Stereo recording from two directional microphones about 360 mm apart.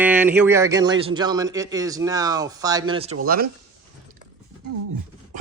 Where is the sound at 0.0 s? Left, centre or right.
Centre; by 3.5 s right.